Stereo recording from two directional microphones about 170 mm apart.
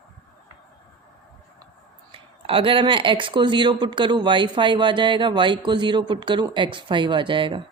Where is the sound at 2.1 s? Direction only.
30° right (ahead or behind).